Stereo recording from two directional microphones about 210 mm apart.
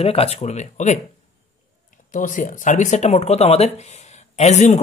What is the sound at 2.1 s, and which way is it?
Speech, 40° left (ahead or behind).